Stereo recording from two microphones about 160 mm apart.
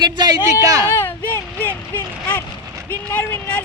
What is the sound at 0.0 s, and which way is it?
Speech, 25° right (ahead or behind).